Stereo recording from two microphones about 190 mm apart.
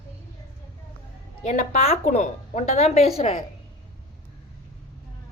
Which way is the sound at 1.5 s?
35° left (ahead or behind).